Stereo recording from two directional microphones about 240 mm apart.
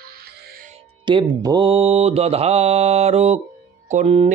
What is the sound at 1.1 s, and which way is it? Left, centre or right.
Mantra, centre.